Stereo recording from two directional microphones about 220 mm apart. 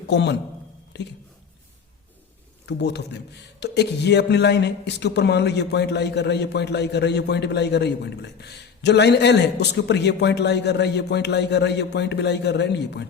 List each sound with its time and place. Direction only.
0.1 s a man's voice: 50° left (ahead or behind)
2.6 s a man's voice: 50° left (ahead or behind)